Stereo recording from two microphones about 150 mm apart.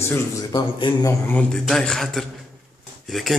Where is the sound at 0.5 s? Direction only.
35° left (ahead or behind).